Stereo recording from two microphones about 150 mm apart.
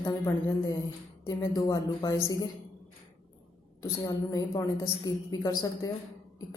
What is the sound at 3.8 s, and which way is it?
A woman's voice, 25° left (ahead or behind).